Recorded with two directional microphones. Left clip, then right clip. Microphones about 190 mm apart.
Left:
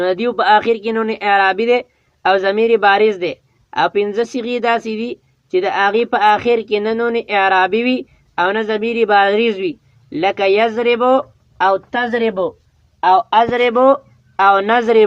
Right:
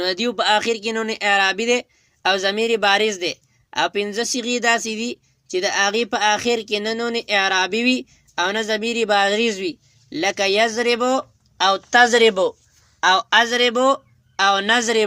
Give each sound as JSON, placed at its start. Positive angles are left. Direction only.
{"t": 0.0, "sound": "speech", "side_deg": -45}
{"t": 11.5, "sound": "speech", "side_deg": -65}
{"t": 11.9, "sound": "a man's voice", "side_deg": -40}
{"t": 13.3, "sound": "speech", "side_deg": -55}
{"t": 13.6, "sound": "speech", "side_deg": -40}